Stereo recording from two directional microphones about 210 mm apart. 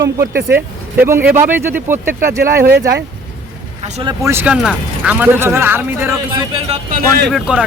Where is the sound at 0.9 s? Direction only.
10° right (ahead or behind).